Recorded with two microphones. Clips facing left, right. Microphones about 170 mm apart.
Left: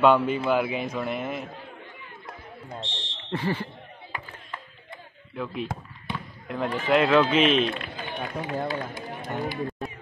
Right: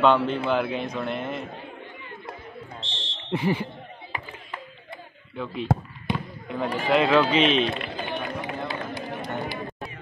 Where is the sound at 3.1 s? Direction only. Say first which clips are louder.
Right 3 dB; 15° right (ahead or behind).